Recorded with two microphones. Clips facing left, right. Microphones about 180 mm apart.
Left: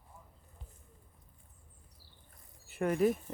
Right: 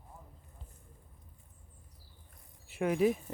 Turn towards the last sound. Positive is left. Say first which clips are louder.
# right 1 dB
turn(degrees=0)  # may be behind; listen again after turning